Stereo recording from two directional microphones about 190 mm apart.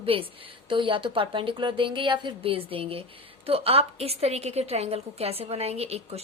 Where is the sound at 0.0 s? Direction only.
30° right (ahead or behind).